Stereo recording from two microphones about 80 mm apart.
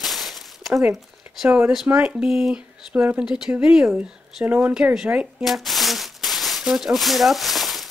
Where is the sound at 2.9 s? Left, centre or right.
Centre.